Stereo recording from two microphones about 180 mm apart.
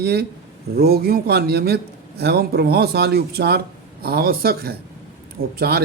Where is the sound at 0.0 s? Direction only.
60° right (ahead or behind).